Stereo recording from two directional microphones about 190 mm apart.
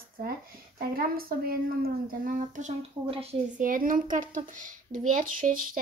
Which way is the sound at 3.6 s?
45° right (ahead or behind).